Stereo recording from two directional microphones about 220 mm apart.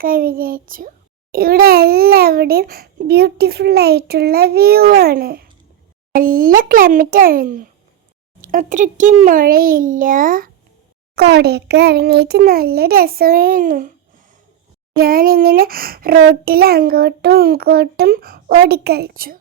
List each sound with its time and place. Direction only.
0.0 s a child's voice: 40° right (ahead or behind)
14.9 s a child's voice: 40° right (ahead or behind)